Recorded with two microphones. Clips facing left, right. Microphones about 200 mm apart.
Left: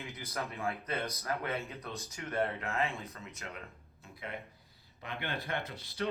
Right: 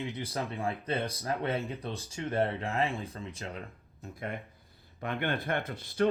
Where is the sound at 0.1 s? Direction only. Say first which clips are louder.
Right 5 dB; 30° right (ahead or behind).